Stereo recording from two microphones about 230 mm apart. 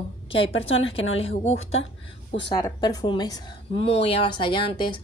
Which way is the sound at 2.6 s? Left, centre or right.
Centre.